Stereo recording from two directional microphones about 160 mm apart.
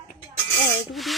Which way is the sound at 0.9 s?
Centre (ahead or behind).